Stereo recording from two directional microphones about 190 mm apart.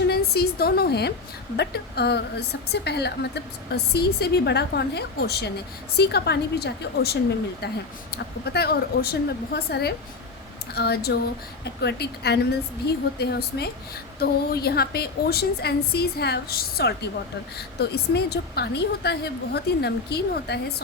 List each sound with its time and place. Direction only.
0.1 s a woman's voice: 55° left (ahead or behind)